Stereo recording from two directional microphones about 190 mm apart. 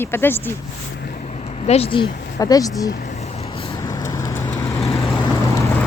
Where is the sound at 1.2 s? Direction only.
35° left (ahead or behind).